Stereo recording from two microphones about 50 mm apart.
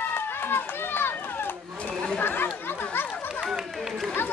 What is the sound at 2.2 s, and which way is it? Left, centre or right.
Speech, left.